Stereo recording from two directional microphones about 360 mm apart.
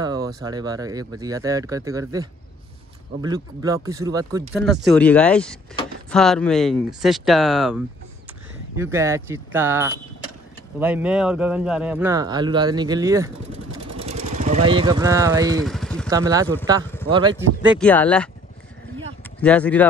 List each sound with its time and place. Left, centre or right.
0.0 s a sound: centre
0.4 s speech: centre
4.6 s speech: centre
13.9 s vehicle: centre
14.7 s speech: centre
15.6 s vehicle: centre
16.1 s speech: centre
17.7 s speech: centre
19.4 s speech: centre